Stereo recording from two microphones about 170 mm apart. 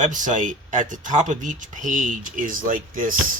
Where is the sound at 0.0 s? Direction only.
50° right (ahead or behind).